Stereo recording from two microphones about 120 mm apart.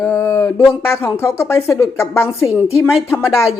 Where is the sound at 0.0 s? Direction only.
20° left (ahead or behind).